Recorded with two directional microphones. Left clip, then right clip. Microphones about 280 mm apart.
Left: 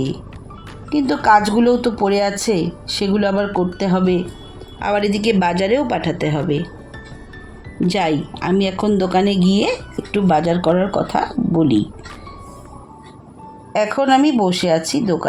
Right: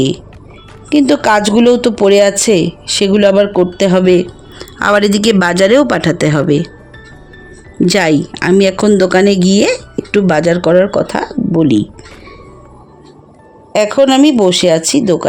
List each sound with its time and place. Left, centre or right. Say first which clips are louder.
0.9 s speech: right 4 dB; right
7.9 s speech: right 7 dB; right
13.7 s speech: right 6 dB; right